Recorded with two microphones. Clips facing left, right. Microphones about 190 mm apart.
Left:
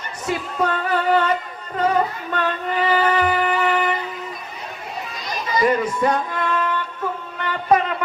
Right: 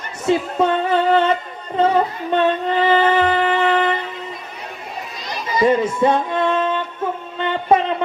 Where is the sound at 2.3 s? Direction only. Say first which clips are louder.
Right 8 dB; 25° right (ahead or behind).